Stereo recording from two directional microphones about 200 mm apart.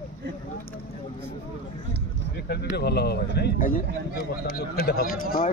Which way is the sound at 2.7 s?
55° left (ahead or behind).